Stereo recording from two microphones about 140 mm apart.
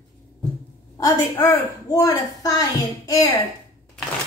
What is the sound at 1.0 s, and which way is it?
A woman's voice, 25° left (ahead or behind).